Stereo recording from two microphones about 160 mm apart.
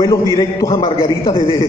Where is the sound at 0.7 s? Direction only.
35° left (ahead or behind).